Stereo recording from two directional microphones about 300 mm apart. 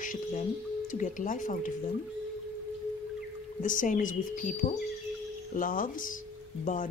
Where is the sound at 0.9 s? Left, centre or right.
Left.